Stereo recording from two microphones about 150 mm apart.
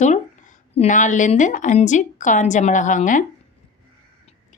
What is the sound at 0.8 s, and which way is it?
A woman's voice, 55° left (ahead or behind).